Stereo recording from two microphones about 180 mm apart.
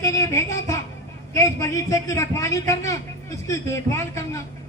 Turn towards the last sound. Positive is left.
turn(degrees=15)  # may be behind; listen again after turning